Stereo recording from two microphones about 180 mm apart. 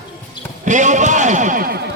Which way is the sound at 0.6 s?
45° right (ahead or behind).